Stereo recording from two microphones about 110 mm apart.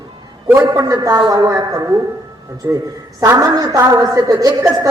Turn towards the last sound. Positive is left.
turn(degrees=-30)  # may be behind; listen again after turning